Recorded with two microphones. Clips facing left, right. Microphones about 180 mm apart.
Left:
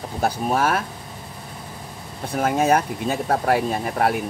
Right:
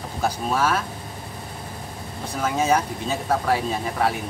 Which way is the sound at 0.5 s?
55° left (ahead or behind).